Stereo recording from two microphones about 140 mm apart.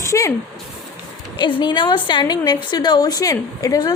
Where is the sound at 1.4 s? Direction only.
35° left (ahead or behind).